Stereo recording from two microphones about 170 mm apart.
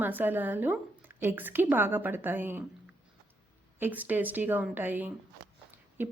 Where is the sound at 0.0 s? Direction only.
10° right (ahead or behind).